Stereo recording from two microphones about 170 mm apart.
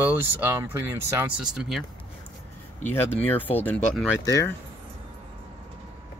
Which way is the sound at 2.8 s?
10° left (ahead or behind).